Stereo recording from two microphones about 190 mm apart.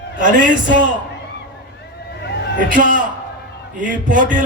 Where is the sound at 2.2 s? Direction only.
60° left (ahead or behind).